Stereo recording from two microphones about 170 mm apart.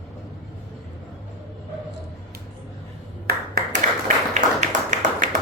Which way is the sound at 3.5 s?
50° right (ahead or behind).